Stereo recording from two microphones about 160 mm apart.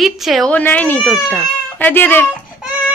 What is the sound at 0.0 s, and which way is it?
Speech, centre (ahead or behind).